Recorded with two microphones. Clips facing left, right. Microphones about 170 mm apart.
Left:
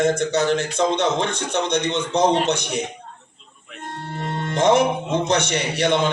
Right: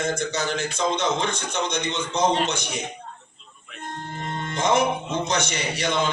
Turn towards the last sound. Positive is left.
turn(degrees=65)  # may be behind; listen again after turning